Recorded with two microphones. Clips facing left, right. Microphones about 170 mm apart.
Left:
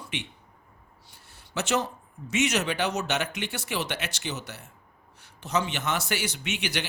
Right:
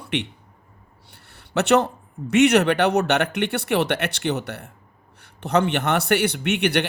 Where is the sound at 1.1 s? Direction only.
65° right (ahead or behind).